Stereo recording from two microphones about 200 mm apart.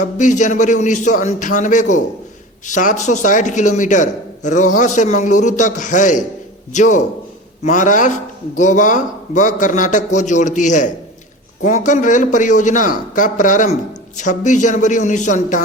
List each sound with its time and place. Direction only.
0.0 s a man's voice: 40° left (ahead or behind)